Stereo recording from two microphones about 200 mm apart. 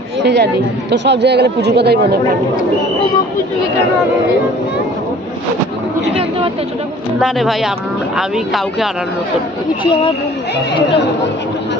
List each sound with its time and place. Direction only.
0.2 s speech: 60° right (ahead or behind)
7.2 s speech: centre (ahead or behind)